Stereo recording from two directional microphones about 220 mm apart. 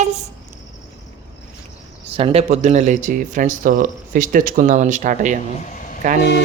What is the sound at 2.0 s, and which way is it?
Speech, 25° right (ahead or behind).